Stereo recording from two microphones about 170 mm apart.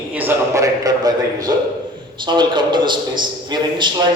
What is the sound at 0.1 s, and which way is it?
A man's voice, 10° right (ahead or behind).